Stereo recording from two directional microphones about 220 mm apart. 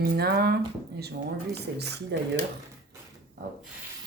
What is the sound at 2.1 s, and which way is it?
Speech, 50° right (ahead or behind).